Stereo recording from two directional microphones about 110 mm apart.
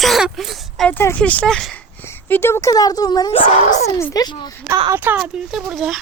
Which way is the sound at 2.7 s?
35° left (ahead or behind).